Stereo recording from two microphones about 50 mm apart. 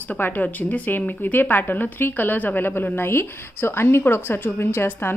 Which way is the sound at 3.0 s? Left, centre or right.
Left.